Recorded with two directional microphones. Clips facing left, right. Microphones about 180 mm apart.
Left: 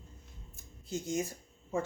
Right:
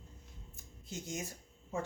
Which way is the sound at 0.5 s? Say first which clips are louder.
Left 7 dB; 35° left (ahead or behind).